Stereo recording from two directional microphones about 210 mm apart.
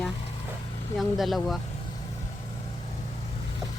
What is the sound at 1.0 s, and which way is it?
Speech, centre (ahead or behind).